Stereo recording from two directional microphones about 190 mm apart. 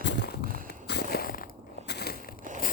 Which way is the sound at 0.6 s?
60° left (ahead or behind).